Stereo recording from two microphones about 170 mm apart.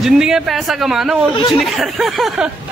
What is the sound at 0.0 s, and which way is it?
Speech, 5° right (ahead or behind).